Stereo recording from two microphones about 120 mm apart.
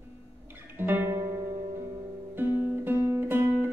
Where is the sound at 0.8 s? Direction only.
15° right (ahead or behind).